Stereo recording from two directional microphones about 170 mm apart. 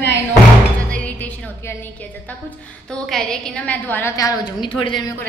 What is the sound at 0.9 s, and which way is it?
Music, 10° left (ahead or behind).